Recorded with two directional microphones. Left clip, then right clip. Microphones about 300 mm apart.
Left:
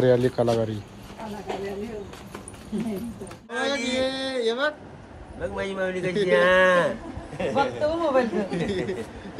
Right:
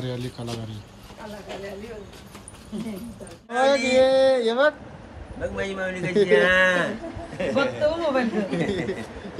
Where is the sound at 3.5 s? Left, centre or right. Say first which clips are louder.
Right 7 dB; centre.